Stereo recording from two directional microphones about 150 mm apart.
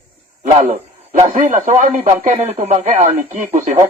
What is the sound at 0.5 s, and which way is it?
Speech, 50° right (ahead or behind).